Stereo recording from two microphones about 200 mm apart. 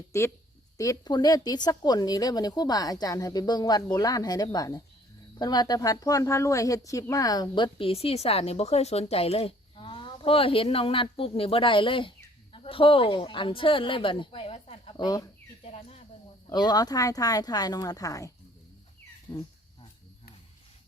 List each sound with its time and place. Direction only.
0.1 s a woman's voice: 15° left (ahead or behind)
15.6 s speech: 30° left (ahead or behind)
16.5 s a woman's voice: 20° left (ahead or behind)
19.3 s a woman's voice: 20° left (ahead or behind)